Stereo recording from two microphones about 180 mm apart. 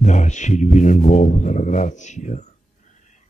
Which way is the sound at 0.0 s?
40° left (ahead or behind).